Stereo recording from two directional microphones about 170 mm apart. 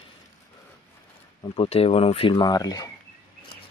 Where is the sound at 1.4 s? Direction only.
30° left (ahead or behind).